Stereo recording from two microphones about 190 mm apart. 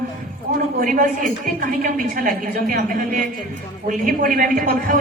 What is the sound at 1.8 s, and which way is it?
Speech, 45° right (ahead or behind).